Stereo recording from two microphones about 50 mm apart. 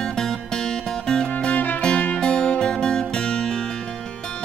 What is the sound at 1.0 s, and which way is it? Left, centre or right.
Music, centre.